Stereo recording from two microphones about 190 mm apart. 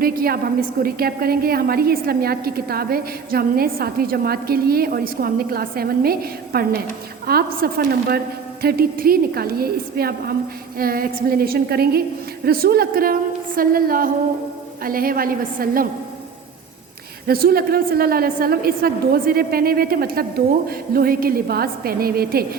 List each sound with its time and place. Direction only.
0.0 s a woman's voice: 50° right (ahead or behind)
17.2 s a woman's voice: 50° right (ahead or behind)